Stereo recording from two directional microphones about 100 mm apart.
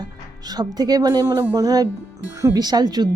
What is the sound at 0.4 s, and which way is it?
Speech, 45° right (ahead or behind).